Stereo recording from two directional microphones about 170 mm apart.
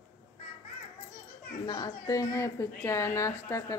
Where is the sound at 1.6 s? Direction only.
25° left (ahead or behind).